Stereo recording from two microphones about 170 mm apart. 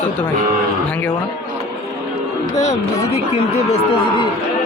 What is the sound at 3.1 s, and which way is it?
Speech, 40° left (ahead or behind).